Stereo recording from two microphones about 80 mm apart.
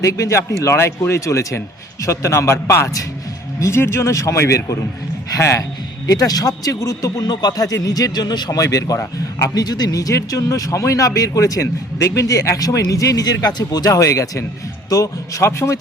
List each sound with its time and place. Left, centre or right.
0.0 s speech: left
6.1 s speech: left